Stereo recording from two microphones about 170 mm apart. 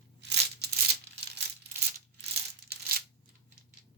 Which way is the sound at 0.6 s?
70° right (ahead or behind).